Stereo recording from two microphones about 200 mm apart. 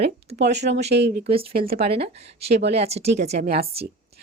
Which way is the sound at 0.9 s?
55° right (ahead or behind).